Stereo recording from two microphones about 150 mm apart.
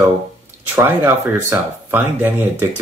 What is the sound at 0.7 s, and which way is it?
Speech, 15° right (ahead or behind).